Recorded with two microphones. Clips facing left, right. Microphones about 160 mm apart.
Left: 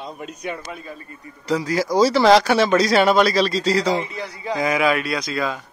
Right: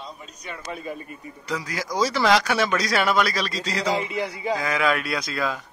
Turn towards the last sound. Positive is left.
turn(degrees=0)  # may be behind; listen again after turning